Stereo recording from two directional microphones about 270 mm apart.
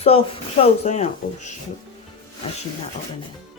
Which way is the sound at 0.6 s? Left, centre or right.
Left.